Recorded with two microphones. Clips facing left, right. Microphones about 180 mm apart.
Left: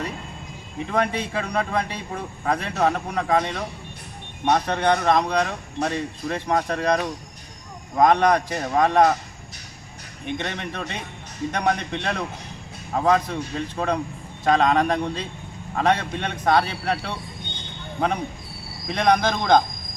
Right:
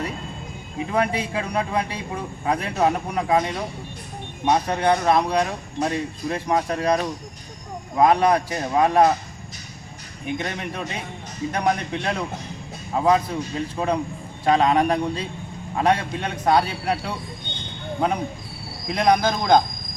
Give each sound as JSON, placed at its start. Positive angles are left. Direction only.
{"t": 0.9, "sound": "a man's voice", "side_deg": -10}
{"t": 10.2, "sound": "a man's voice", "side_deg": -10}
{"t": 18.9, "sound": "a man's voice", "side_deg": -10}